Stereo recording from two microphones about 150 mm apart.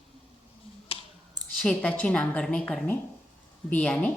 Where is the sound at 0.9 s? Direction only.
40° left (ahead or behind).